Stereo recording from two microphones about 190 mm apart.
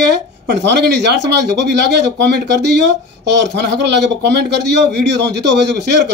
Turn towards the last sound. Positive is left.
turn(degrees=-60)  # may be behind; listen again after turning